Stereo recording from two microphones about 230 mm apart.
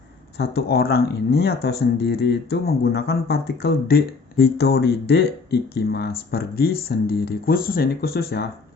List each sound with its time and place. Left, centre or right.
0.3 s speech: left